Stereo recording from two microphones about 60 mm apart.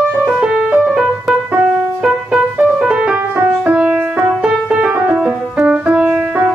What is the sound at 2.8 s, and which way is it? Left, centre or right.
Music, centre.